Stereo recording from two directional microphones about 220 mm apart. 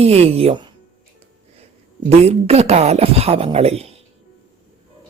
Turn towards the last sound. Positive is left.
turn(degrees=-30)  # may be behind; listen again after turning